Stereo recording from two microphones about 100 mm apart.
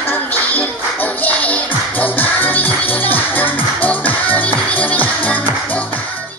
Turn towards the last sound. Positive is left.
turn(degrees=15)  # may be behind; listen again after turning